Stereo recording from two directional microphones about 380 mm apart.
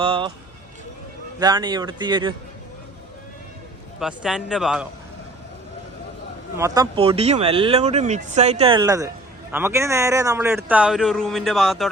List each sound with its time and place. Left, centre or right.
0.0 s speech: centre
1.4 s speech: centre
4.0 s speech: centre
6.6 s speech: centre